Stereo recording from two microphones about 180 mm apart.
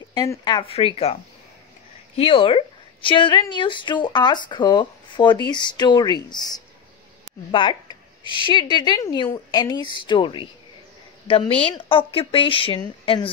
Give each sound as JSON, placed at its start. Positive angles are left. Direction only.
{"t": 0.1, "sound": "a woman's voice", "side_deg": 20}
{"t": 2.1, "sound": "a woman's voice", "side_deg": 30}